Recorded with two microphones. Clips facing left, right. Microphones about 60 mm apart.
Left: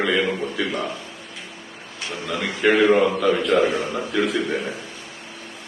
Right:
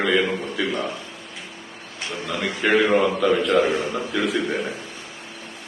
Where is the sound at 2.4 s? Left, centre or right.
Centre.